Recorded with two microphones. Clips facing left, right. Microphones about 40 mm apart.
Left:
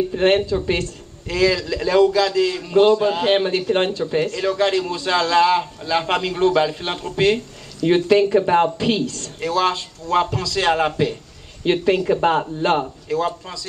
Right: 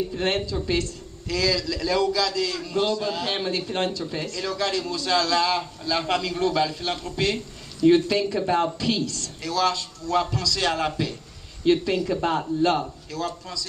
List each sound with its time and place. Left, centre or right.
0.1 s a man's voice: left